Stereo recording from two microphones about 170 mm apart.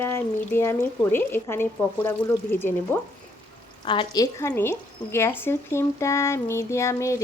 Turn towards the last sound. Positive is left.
turn(degrees=15)  # may be behind; listen again after turning